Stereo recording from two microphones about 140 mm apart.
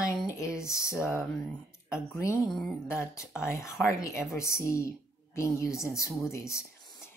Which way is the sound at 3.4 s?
20° left (ahead or behind).